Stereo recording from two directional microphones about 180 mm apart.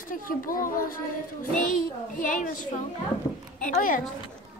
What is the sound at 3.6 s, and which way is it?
Speech, 50° left (ahead or behind).